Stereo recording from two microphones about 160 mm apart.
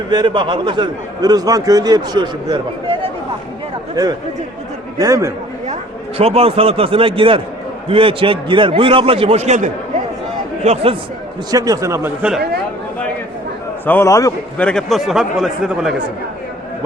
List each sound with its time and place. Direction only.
0.1 s a man's voice: 30° right (ahead or behind)
4.9 s a man's voice: 20° right (ahead or behind)
6.1 s a man's voice: 40° right (ahead or behind)
11.5 s a man's voice: 20° right (ahead or behind)
13.8 s a man's voice: 15° left (ahead or behind)
14.6 s speech: 5° left (ahead or behind)